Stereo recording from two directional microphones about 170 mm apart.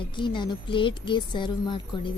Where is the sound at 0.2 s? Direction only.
30° left (ahead or behind).